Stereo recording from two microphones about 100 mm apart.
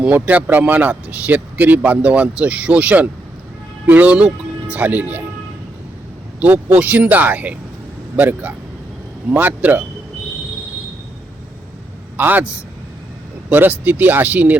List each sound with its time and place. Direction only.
0.0 s speech: 15° right (ahead or behind)
6.4 s speech: 15° right (ahead or behind)
12.1 s a man's voice: 20° right (ahead or behind)
13.5 s speech: 20° right (ahead or behind)